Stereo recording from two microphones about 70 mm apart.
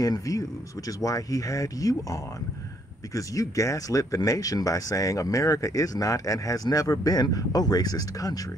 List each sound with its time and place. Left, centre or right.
0.0 s speech: left
3.2 s speech: left